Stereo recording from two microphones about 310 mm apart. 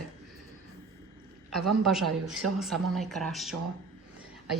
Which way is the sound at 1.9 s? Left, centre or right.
Centre.